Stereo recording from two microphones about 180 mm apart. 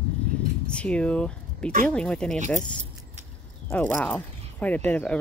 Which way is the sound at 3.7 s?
10° left (ahead or behind).